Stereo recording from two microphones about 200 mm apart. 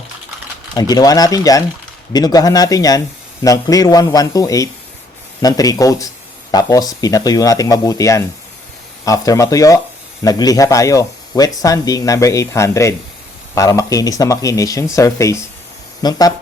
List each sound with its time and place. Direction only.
0.8 s speech: 20° left (ahead or behind)